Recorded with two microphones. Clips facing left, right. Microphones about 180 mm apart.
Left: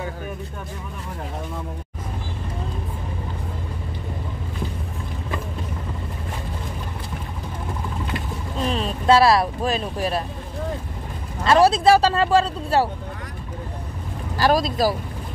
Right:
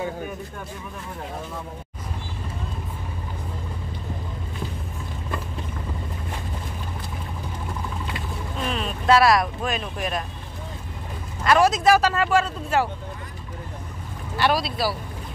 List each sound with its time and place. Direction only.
8.5 s speech: 35° left (ahead or behind)
11.4 s speech: 30° left (ahead or behind)
14.3 s speech: 40° left (ahead or behind)